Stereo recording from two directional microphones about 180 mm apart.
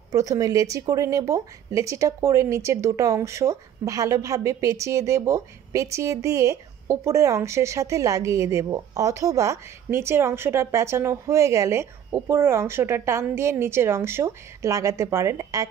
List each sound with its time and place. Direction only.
0.1 s speech: 20° right (ahead or behind)